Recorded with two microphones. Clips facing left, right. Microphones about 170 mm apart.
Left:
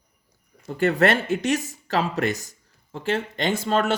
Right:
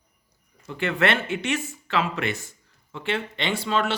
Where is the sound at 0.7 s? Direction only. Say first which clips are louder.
Left 4 dB; 40° left (ahead or behind).